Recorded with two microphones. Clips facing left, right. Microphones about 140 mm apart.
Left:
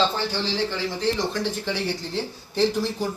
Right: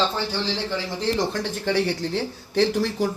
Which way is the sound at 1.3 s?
60° right (ahead or behind).